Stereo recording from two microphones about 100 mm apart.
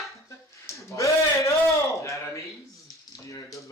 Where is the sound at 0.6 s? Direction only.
30° left (ahead or behind).